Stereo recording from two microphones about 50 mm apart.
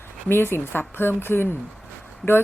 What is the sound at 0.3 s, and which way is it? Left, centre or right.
Speech, left.